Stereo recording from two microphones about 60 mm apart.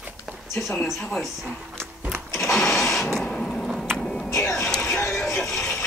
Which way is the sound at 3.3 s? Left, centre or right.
Centre.